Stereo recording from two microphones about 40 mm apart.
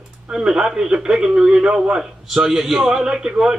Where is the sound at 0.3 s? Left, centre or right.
Centre.